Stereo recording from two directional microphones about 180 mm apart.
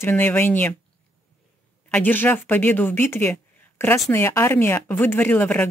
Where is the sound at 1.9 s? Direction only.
10° left (ahead or behind).